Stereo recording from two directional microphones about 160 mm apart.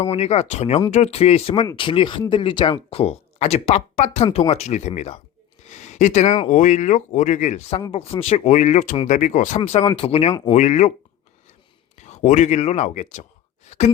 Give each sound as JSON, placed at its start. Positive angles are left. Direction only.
{"t": 0.0, "sound": "speech", "side_deg": 40}
{"t": 9.6, "sound": "speech", "side_deg": 35}
{"t": 11.9, "sound": "speech", "side_deg": 45}
{"t": 13.7, "sound": "a sound", "side_deg": 45}